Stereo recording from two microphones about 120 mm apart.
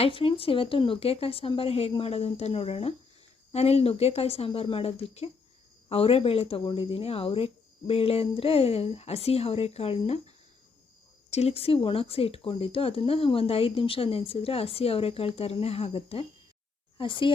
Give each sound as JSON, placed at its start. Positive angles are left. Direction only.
{"t": 0.0, "sound": "speech", "side_deg": 50}